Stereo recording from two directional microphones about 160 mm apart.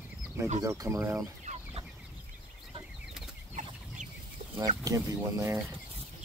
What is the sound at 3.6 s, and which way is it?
Chicken, 50° right (ahead or behind).